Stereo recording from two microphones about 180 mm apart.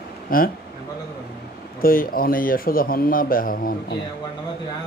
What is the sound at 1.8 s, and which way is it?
A man's voice, 50° left (ahead or behind).